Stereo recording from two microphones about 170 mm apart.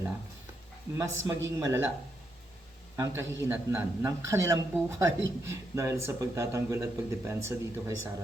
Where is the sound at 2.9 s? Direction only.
15° right (ahead or behind).